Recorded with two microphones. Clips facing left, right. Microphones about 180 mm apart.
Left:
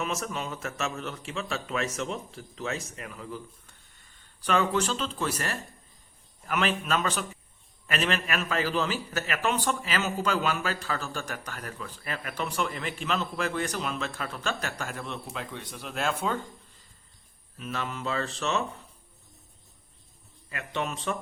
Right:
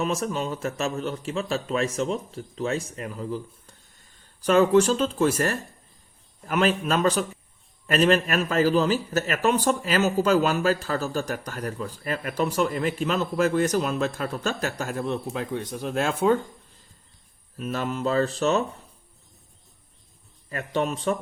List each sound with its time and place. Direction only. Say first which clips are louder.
0.0 s a man's voice: right 6 dB; 35° right (ahead or behind)
17.6 s a man's voice: right 7 dB; 40° right (ahead or behind)
20.5 s a man's voice: right 6 dB; 40° right (ahead or behind)